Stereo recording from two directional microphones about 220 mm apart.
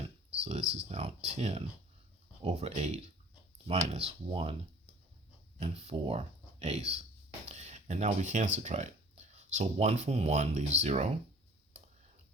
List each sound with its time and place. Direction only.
0.7 s speech: 30° right (ahead or behind)
5.5 s speech: 30° right (ahead or behind)
7.4 s a sound: 30° right (ahead or behind)
8.5 s speech: 30° right (ahead or behind)